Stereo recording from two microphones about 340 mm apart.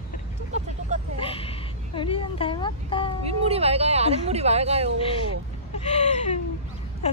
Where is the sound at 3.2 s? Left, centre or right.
Centre.